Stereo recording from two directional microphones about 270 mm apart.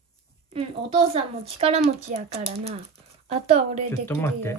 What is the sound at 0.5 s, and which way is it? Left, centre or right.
Speech, right.